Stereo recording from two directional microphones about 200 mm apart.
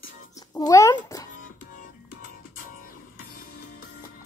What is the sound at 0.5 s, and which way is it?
Cat, 15° left (ahead or behind).